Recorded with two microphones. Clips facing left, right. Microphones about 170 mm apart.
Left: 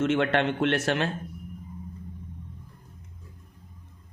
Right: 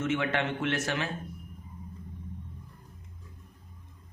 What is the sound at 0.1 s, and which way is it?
A man's voice, 65° left (ahead or behind).